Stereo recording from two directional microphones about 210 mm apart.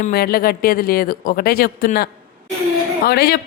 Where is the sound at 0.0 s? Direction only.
45° left (ahead or behind).